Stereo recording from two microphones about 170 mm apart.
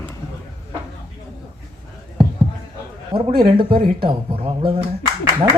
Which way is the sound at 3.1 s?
30° right (ahead or behind).